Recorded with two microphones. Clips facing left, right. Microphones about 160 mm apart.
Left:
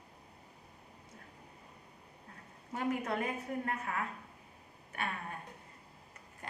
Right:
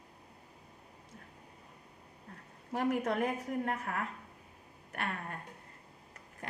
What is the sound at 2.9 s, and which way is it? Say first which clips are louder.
Speech: right 3 dB; 90° right.